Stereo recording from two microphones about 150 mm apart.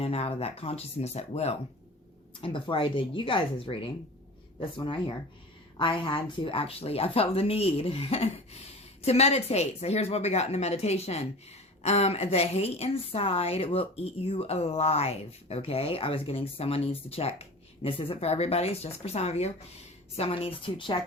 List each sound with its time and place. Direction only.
0.0 s a woman's voice: 40° left (ahead or behind)